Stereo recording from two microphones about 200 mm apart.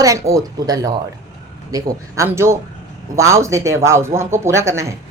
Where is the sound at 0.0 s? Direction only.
15° right (ahead or behind).